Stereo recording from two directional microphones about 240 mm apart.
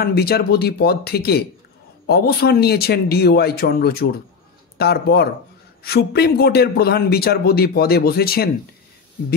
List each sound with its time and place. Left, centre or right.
0.0 s a man's voice: left